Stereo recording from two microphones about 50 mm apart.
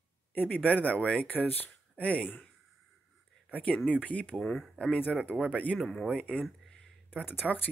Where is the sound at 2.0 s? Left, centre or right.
Left.